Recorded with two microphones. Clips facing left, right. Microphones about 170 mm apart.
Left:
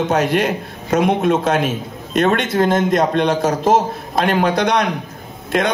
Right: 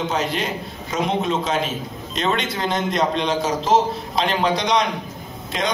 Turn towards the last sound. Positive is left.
turn(degrees=55)  # may be behind; listen again after turning